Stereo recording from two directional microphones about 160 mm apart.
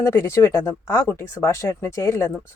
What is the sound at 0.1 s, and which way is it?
Speech, 15° left (ahead or behind).